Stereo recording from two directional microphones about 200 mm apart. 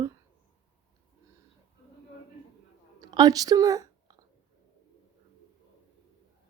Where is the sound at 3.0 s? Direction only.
20° right (ahead or behind).